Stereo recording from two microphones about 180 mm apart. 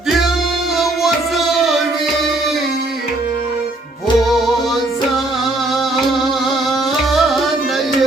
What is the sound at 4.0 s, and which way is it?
Music, centre (ahead or behind).